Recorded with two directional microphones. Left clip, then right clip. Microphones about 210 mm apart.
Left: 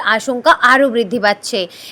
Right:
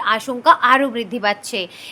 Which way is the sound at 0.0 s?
20° left (ahead or behind).